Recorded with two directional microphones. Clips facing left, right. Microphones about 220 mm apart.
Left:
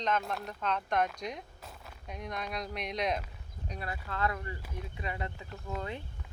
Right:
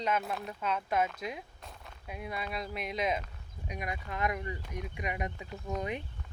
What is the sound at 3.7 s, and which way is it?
Speech, 15° right (ahead or behind).